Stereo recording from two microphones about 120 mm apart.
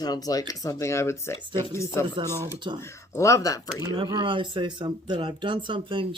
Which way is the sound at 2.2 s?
25° right (ahead or behind).